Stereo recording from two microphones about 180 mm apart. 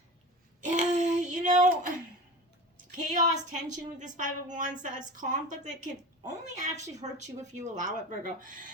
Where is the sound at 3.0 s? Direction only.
45° right (ahead or behind).